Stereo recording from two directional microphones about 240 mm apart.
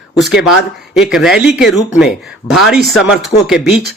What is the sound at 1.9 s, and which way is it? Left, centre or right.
Speech, left.